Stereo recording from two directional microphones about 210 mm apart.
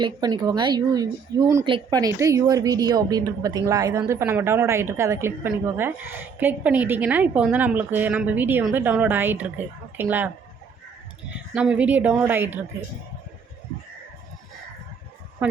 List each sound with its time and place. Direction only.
0.0 s a woman's voice: 20° right (ahead or behind)
11.5 s a woman's voice: 5° right (ahead or behind)